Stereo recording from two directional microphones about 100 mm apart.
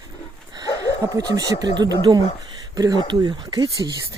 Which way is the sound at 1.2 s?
40° right (ahead or behind).